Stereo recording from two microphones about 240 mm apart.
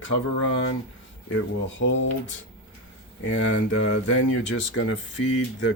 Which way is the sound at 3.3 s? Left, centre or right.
Left.